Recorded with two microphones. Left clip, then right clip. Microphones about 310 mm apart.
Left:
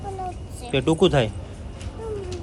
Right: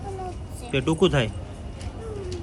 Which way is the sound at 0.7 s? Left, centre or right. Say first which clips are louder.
Left 3 dB; centre.